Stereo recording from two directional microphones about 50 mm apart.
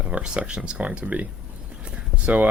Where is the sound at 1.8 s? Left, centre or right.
Right.